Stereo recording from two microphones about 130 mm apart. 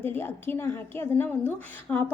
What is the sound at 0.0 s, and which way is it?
A woman's voice, 15° left (ahead or behind).